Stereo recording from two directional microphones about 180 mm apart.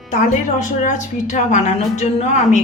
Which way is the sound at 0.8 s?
40° left (ahead or behind).